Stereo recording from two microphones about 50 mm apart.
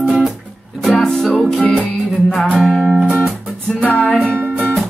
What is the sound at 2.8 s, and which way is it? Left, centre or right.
Music, right.